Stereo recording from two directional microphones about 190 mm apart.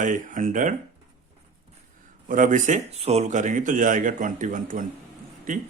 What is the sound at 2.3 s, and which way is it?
Speech, 45° right (ahead or behind).